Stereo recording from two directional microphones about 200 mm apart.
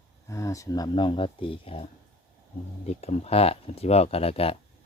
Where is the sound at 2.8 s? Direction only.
30° left (ahead or behind).